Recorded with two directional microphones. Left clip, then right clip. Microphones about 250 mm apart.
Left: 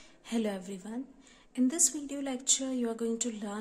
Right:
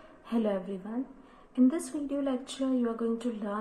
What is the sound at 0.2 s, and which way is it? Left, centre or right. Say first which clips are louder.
A woman's voice: right 4 dB; left.